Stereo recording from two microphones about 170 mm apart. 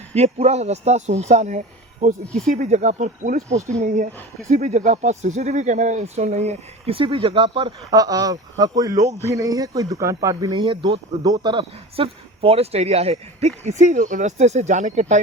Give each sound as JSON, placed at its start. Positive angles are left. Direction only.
{"t": 0.1, "sound": "speech", "side_deg": -40}